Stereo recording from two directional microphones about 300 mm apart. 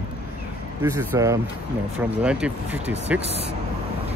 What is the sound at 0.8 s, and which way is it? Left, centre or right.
Speech, centre.